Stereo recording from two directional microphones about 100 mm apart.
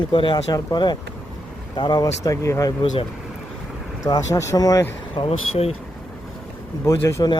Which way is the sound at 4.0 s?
35° left (ahead or behind).